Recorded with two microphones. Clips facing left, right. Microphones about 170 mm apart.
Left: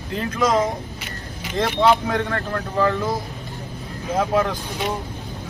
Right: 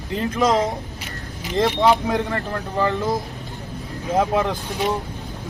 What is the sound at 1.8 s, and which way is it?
Speech, 20° right (ahead or behind).